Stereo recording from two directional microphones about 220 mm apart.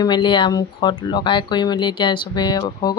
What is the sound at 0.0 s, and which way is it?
Speech, 20° left (ahead or behind).